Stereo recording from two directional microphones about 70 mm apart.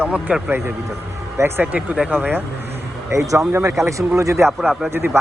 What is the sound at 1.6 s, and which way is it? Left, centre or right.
Speech, centre.